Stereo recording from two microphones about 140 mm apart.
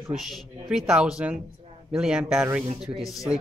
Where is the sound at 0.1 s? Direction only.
Centre (ahead or behind).